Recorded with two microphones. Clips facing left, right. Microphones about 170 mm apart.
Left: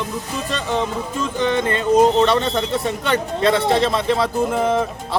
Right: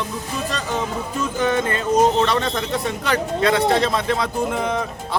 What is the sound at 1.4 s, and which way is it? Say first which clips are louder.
Music: left 1 dB; 25° left (ahead or behind).